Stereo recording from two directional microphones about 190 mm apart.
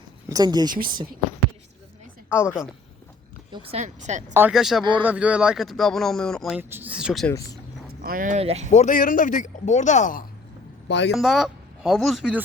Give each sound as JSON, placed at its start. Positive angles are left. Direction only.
{"t": 0.3, "sound": "speech", "side_deg": -20}
{"t": 2.3, "sound": "a woman's voice", "side_deg": 10}
{"t": 3.5, "sound": "speech", "side_deg": -30}
{"t": 4.4, "sound": "speech", "side_deg": -5}
{"t": 6.6, "sound": "speech", "side_deg": -10}
{"t": 7.3, "sound": "speech", "side_deg": 20}
{"t": 8.0, "sound": "speech", "side_deg": -45}
{"t": 8.7, "sound": "speech", "side_deg": 40}
{"t": 10.8, "sound": "speech", "side_deg": 65}
{"t": 11.1, "sound": "speech", "side_deg": 0}